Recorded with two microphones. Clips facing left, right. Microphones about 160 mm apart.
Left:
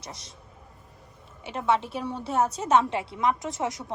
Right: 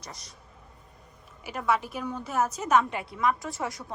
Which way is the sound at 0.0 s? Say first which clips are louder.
Left 2 dB; centre (ahead or behind).